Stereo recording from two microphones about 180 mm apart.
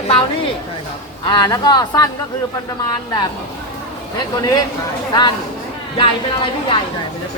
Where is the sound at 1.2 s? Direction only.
25° left (ahead or behind).